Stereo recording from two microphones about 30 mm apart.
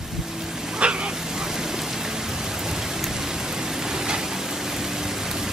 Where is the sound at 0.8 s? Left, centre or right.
Right.